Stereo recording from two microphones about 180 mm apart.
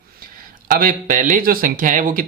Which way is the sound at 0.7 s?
50° right (ahead or behind).